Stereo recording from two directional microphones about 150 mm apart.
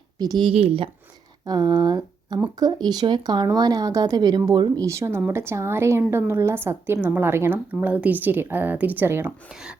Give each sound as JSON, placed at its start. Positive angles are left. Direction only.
{"t": 0.2, "sound": "speech", "side_deg": -30}
{"t": 1.5, "sound": "speech", "side_deg": -25}